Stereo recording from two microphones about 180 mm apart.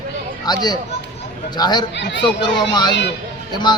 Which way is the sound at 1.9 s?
75° left (ahead or behind).